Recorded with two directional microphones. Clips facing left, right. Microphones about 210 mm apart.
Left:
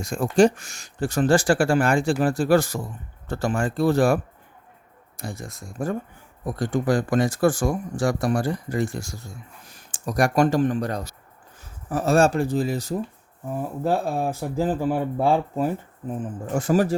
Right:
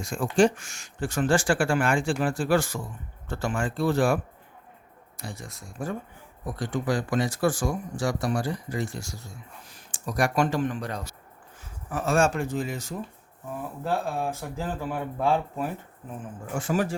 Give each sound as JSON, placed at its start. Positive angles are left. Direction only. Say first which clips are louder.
{"t": 0.0, "sound": "speech", "louder": "left 4 dB", "side_deg": 40}